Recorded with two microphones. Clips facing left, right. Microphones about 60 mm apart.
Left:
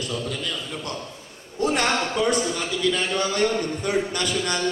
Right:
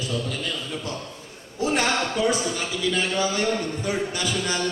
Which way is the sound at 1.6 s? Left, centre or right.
Left.